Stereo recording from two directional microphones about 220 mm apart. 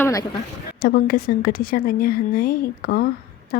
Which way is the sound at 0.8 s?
40° left (ahead or behind).